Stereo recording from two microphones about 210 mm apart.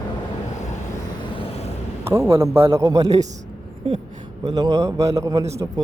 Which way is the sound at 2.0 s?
10° right (ahead or behind).